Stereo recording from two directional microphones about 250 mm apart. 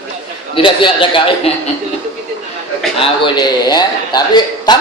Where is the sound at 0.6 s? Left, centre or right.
Centre.